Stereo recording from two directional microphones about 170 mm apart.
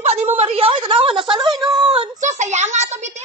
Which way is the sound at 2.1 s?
45° right (ahead or behind).